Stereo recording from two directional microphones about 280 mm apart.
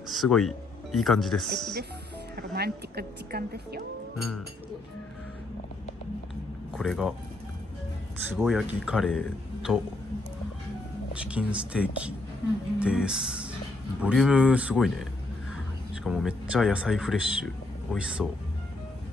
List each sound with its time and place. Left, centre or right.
0.1 s speech: centre
2.3 s speech: right
6.8 s speech: centre
8.3 s speech: centre
11.1 s speech: centre